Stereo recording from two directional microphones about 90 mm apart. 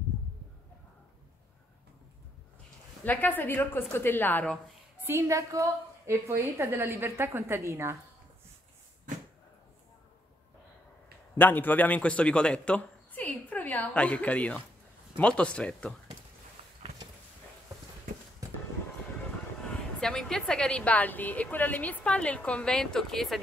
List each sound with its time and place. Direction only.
3.1 s a woman's voice: 20° left (ahead or behind)
5.0 s a woman's voice: 30° right (ahead or behind)
11.3 s a woman's voice: 20° left (ahead or behind)
19.7 s a woman's voice: 5° left (ahead or behind)